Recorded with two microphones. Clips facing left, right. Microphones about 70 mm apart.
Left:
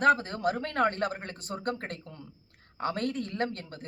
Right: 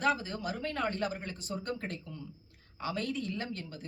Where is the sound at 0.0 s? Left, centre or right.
Left.